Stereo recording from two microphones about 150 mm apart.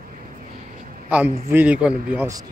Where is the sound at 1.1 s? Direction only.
10° right (ahead or behind).